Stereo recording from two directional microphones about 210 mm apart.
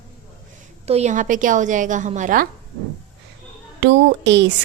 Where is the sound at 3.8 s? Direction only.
60° right (ahead or behind).